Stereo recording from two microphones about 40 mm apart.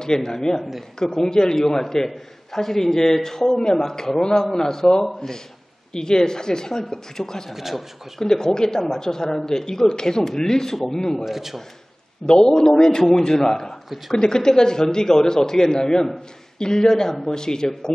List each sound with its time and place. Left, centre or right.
0.0 s a man's voice: centre
7.5 s a man's voice: centre
8.2 s a man's voice: centre
11.2 s a man's voice: centre
12.3 s a man's voice: centre